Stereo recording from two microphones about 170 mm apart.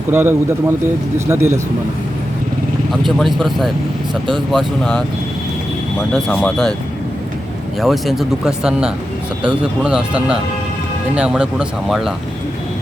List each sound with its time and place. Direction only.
0.1 s speech: 15° right (ahead or behind)
3.2 s speech: centre (ahead or behind)
6.2 s speech: 10° left (ahead or behind)
7.8 s speech: centre (ahead or behind)